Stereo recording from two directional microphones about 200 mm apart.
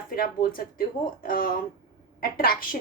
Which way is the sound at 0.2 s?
45° left (ahead or behind).